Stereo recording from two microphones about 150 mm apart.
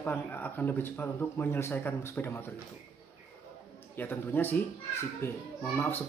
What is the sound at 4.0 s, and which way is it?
Speech, 15° left (ahead or behind).